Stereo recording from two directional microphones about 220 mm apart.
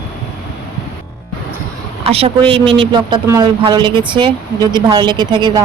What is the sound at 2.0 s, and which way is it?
Speech, 25° right (ahead or behind).